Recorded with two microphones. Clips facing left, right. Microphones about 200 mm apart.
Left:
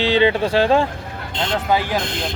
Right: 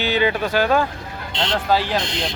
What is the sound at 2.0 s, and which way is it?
Speech, 55° left (ahead or behind).